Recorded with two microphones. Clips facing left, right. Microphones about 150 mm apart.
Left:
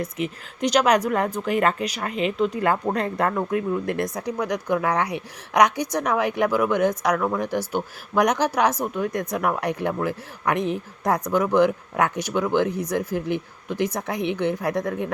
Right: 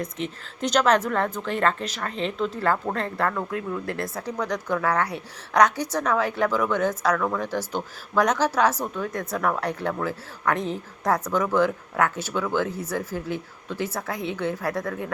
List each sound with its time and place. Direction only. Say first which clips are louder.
0.0 s speech: left 3 dB; 10° left (ahead or behind)